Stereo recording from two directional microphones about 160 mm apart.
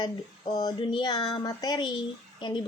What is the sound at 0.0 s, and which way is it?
Speech, 25° left (ahead or behind).